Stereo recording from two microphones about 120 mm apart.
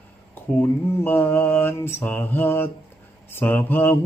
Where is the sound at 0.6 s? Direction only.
20° left (ahead or behind).